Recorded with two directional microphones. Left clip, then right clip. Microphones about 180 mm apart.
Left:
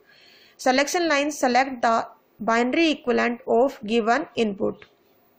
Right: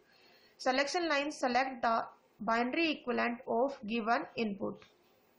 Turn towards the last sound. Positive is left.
turn(degrees=35)  # may be behind; listen again after turning